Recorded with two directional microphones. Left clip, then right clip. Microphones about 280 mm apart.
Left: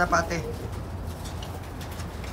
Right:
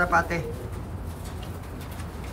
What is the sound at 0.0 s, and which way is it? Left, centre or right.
Speech, centre.